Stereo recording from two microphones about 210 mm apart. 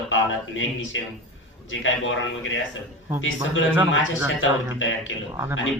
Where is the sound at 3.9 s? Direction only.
65° left (ahead or behind).